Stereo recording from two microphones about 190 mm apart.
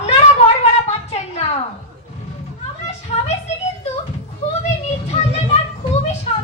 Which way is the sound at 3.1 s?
35° left (ahead or behind).